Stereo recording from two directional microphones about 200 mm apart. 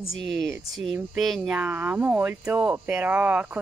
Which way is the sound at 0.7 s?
Centre (ahead or behind).